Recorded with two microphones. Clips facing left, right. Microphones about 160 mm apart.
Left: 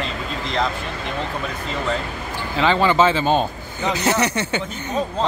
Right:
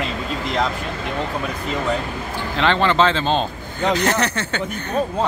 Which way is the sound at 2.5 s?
5° left (ahead or behind).